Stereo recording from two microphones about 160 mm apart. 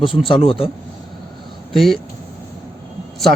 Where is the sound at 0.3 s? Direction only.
35° left (ahead or behind).